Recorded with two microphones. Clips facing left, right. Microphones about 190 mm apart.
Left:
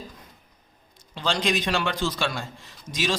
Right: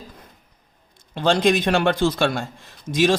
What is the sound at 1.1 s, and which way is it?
Speech, 55° right (ahead or behind).